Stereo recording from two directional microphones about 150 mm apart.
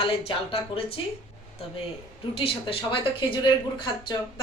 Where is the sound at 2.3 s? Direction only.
40° left (ahead or behind).